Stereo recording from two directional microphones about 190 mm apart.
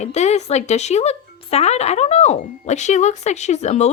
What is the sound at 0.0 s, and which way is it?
Speech, 35° left (ahead or behind).